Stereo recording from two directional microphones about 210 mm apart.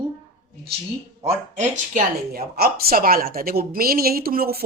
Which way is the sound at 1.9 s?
45° right (ahead or behind).